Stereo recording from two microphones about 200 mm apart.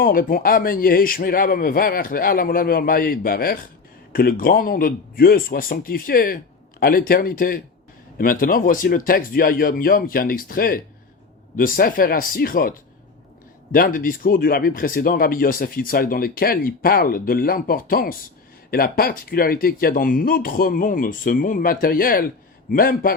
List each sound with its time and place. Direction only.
0.0 s speech: 45° left (ahead or behind)
13.7 s speech: 45° left (ahead or behind)